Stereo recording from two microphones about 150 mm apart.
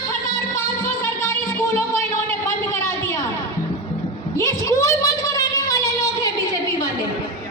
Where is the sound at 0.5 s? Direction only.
20° left (ahead or behind).